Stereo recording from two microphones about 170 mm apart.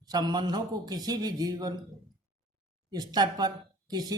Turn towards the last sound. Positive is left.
turn(degrees=-25)  # may be behind; listen again after turning